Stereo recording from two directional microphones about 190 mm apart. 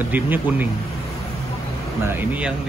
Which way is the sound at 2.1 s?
10° right (ahead or behind).